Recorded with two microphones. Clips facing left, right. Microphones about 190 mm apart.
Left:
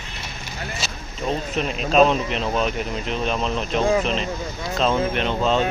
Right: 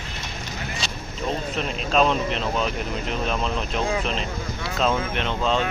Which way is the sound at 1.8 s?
5° left (ahead or behind).